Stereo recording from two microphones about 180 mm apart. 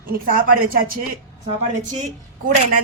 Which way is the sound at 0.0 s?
50° right (ahead or behind).